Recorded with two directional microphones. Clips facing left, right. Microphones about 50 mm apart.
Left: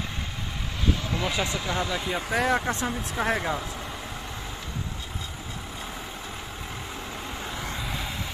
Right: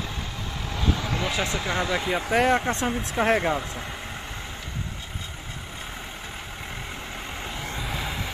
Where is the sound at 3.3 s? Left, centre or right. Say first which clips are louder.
Right 6 dB; right.